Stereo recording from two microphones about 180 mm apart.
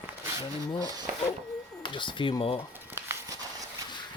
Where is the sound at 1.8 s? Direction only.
25° left (ahead or behind).